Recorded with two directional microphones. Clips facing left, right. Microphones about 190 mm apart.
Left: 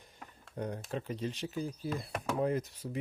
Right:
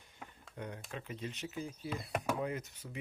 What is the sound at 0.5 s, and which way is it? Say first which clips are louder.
Speech: left 7 dB; 40° left (ahead or behind).